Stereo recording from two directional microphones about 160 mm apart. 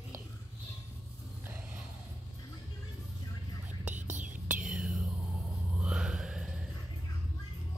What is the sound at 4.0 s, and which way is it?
Whispering, 50° right (ahead or behind).